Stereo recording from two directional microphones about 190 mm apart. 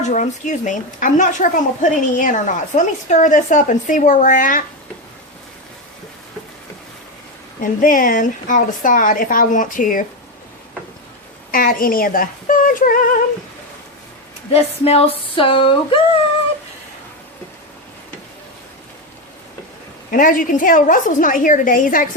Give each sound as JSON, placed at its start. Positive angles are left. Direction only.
{"t": 0.0, "sound": "a woman's voice", "side_deg": 40}
{"t": 7.6, "sound": "a woman's voice", "side_deg": 45}
{"t": 11.5, "sound": "a woman's voice", "side_deg": 50}
{"t": 14.5, "sound": "speech", "side_deg": 30}
{"t": 20.1, "sound": "a woman's voice", "side_deg": 45}